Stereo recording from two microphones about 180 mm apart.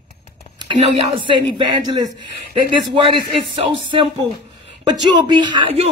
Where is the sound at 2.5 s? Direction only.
25° right (ahead or behind).